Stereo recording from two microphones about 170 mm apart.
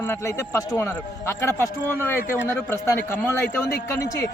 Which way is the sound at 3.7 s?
75° left (ahead or behind).